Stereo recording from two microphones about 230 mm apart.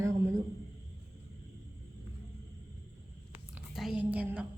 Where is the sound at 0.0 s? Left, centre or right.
Centre.